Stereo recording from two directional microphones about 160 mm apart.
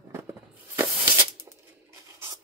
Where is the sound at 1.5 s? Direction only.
20° right (ahead or behind).